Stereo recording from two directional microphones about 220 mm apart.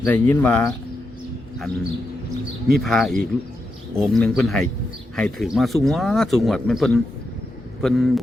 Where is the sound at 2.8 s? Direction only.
Centre (ahead or behind).